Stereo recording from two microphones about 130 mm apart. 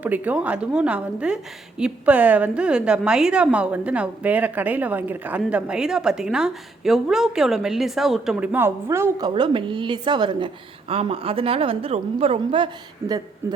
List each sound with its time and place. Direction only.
0.0 s a woman's voice: 10° right (ahead or behind)
8.5 s a woman's voice: 20° right (ahead or behind)
9.3 s a woman's voice: 40° right (ahead or behind)
13.4 s a woman's voice: 20° right (ahead or behind)